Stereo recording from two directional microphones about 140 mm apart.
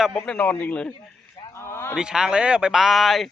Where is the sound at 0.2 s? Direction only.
10° left (ahead or behind).